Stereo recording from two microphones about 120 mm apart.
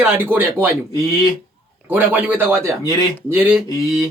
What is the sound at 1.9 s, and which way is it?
A man's voice, 15° right (ahead or behind).